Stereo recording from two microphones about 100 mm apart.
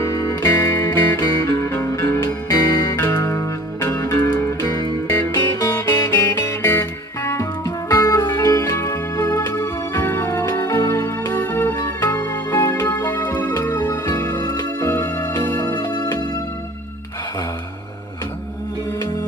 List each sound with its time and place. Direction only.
0.0 s music: 30° left (ahead or behind)
14.4 s music: 40° left (ahead or behind)